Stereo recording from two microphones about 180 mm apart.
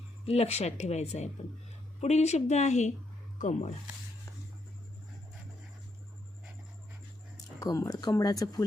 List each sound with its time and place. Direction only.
0.3 s speech: 35° left (ahead or behind)
7.6 s speech: 20° left (ahead or behind)